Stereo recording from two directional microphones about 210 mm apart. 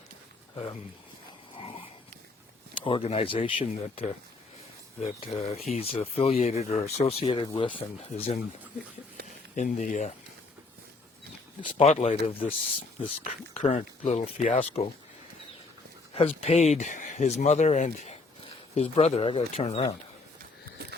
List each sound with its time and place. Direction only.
2.8 s speech: 25° left (ahead or behind)
9.6 s speech: 35° left (ahead or behind)
11.6 s speech: 30° left (ahead or behind)
16.1 s speech: 30° left (ahead or behind)